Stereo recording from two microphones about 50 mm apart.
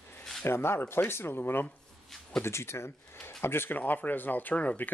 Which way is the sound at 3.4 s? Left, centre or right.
Left.